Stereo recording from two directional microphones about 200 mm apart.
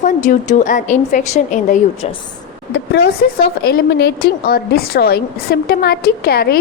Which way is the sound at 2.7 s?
55° left (ahead or behind).